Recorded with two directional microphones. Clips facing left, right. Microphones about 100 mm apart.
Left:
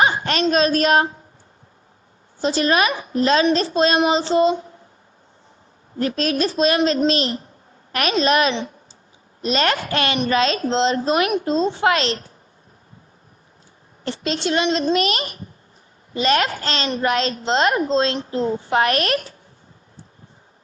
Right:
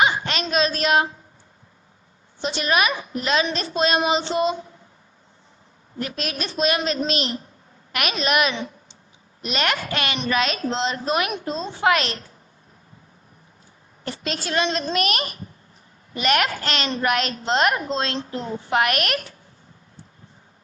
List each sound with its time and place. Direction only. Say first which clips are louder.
0.0 s a sound: left 2 dB; 45° left (ahead or behind)
0.4 s child singing: left 5 dB; 40° left (ahead or behind)
2.4 s child singing: left 4 dB; 35° left (ahead or behind)
6.0 s child singing: left 8 dB; 35° left (ahead or behind)
10.2 s a woman's voice: left 4 dB; 30° left (ahead or behind)
14.0 s a woman's voice: left 5 dB; 25° left (ahead or behind)